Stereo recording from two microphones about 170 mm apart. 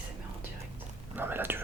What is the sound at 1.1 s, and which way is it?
Whispering, 10° right (ahead or behind).